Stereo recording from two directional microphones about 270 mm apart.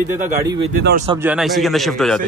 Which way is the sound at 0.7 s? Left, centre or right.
Right.